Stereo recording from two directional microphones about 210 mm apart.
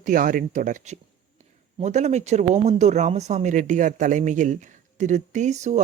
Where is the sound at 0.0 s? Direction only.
40° right (ahead or behind).